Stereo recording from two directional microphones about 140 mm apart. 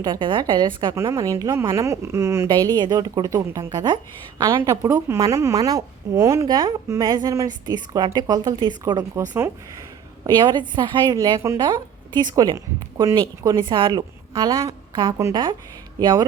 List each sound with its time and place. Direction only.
0.0 s a woman's voice: 35° right (ahead or behind)
0.9 s a woman's voice: 20° right (ahead or behind)
10.2 s a woman's voice: 30° right (ahead or behind)